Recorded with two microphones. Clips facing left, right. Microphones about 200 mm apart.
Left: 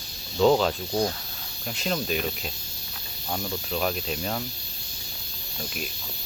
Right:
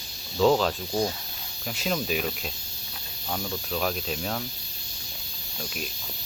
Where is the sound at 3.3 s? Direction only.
5° left (ahead or behind).